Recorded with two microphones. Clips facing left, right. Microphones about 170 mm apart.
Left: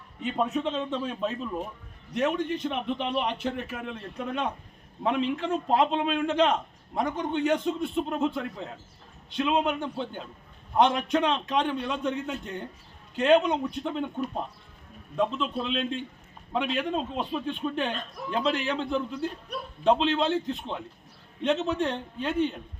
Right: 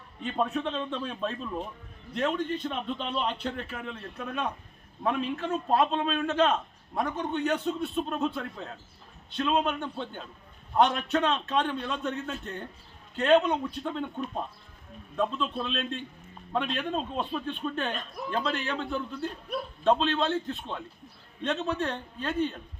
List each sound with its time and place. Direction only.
0.2 s a man's voice: 10° left (ahead or behind)